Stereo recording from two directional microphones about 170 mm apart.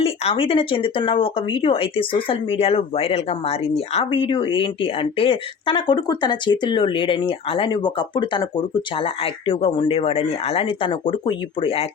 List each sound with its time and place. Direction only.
0.0 s speech: 35° left (ahead or behind)